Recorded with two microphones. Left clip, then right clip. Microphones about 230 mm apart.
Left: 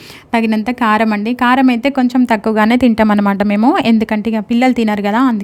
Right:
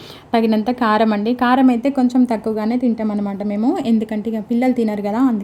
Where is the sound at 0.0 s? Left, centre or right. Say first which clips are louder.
Left 2 dB; left.